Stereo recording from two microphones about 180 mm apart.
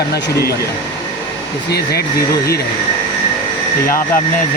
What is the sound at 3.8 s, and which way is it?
Speech, 50° left (ahead or behind).